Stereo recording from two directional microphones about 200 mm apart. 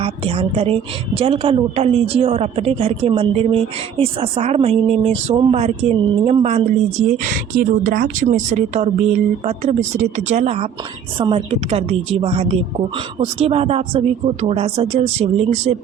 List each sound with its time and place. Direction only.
0.0 s a woman's voice: 30° right (ahead or behind)
7.3 s a woman's voice: 40° right (ahead or behind)